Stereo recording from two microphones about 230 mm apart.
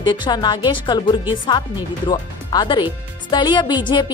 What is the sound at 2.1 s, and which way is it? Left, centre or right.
Speech, centre.